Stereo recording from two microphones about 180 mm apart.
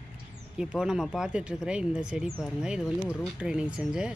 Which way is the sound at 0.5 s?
5° right (ahead or behind).